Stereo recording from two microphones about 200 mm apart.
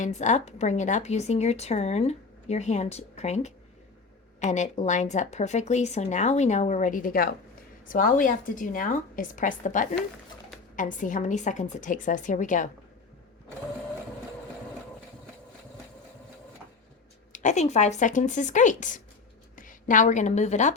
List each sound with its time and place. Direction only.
0.0 s speech: 35° left (ahead or behind)
17.3 s a woman's voice: 35° left (ahead or behind)